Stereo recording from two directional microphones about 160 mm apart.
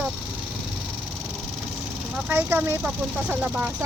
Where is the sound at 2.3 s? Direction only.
10° right (ahead or behind).